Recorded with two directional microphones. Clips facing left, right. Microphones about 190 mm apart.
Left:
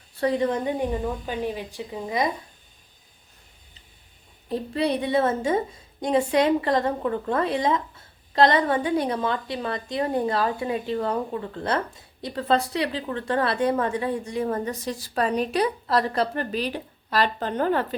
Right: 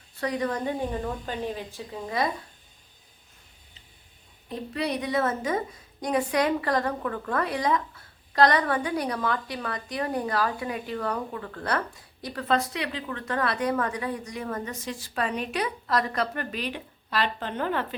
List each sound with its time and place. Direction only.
0.2 s a woman's voice: 25° left (ahead or behind)
4.4 s a woman's voice: 30° left (ahead or behind)